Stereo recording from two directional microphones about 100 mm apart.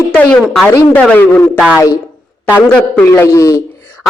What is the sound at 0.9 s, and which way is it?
Speech, 15° left (ahead or behind).